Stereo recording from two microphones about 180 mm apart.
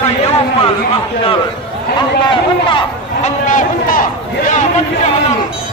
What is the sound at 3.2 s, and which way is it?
Speech, 45° left (ahead or behind).